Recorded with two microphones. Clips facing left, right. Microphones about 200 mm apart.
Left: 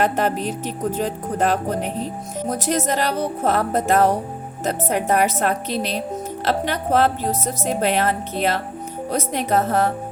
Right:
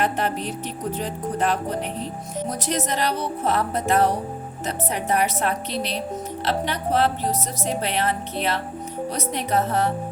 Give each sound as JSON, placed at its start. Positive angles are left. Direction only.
{"t": 0.0, "sound": "speech", "side_deg": 45}